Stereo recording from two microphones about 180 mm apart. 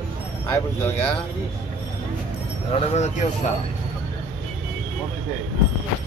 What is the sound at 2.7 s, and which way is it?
Speech, 35° left (ahead or behind).